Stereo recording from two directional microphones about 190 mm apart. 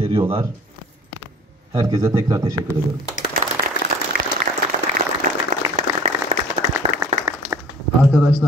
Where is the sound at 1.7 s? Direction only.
20° right (ahead or behind).